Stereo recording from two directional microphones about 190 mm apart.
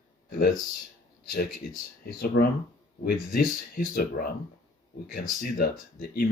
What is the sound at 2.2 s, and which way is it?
Speech, 50° left (ahead or behind).